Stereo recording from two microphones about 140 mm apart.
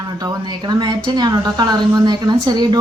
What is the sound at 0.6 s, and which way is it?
A woman's voice, 30° right (ahead or behind).